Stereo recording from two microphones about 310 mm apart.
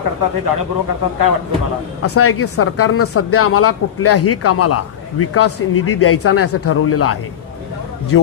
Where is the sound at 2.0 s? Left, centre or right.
Left.